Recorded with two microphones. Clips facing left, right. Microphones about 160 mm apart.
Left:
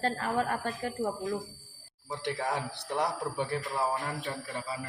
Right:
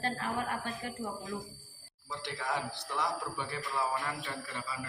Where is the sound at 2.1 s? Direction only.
60° left (ahead or behind).